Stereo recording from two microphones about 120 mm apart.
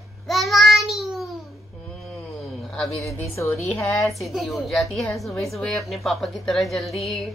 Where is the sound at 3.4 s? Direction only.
20° left (ahead or behind).